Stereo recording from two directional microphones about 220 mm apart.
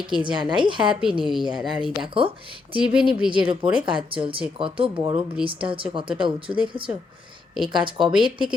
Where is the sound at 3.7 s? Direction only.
20° right (ahead or behind).